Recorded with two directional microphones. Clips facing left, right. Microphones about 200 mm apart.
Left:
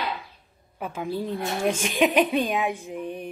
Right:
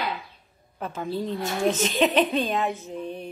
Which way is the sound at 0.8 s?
10° left (ahead or behind).